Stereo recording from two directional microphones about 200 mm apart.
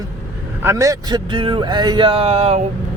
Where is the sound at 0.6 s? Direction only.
15° right (ahead or behind); by 2.6 s 30° right (ahead or behind).